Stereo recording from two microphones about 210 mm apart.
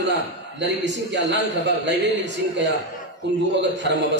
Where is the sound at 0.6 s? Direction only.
55° right (ahead or behind).